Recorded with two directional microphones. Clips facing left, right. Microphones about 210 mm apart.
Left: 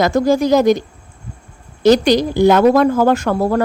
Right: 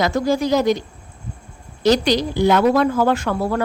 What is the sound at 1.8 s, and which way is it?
A woman's voice, 50° left (ahead or behind).